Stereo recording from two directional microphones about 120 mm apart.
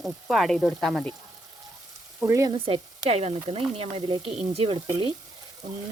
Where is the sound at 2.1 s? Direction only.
25° right (ahead or behind).